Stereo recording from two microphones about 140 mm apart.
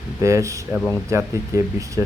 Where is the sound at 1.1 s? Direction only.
20° right (ahead or behind).